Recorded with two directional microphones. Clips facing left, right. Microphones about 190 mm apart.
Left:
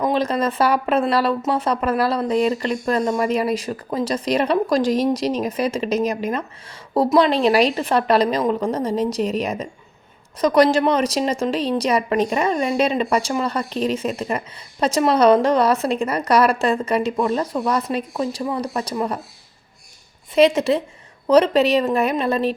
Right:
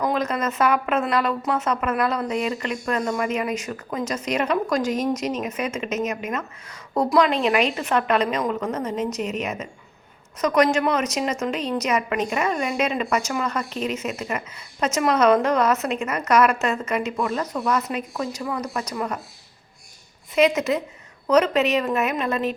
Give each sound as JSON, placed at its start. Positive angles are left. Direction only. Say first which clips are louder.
{"t": 0.0, "sound": "speech", "louder": "left 4 dB", "side_deg": 30}
{"t": 20.3, "sound": "a woman's voice", "louder": "left 4 dB", "side_deg": 30}